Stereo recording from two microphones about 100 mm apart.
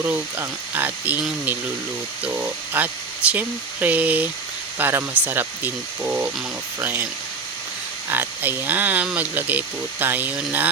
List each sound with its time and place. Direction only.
0.0 s speech: 20° right (ahead or behind)
2.2 s speech: 20° right (ahead or behind)
8.1 s speech: 20° right (ahead or behind)